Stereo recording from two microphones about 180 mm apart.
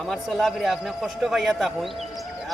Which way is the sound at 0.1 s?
Centre (ahead or behind).